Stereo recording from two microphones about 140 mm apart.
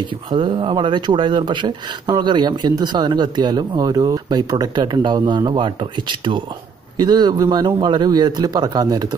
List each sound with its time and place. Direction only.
0.0 s a man's voice: 35° right (ahead or behind)